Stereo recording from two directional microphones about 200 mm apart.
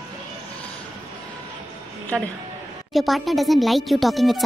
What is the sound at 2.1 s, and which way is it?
A woman's voice, 5° left (ahead or behind).